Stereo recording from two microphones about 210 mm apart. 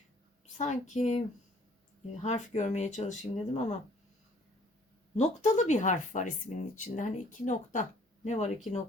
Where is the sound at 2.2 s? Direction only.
35° left (ahead or behind).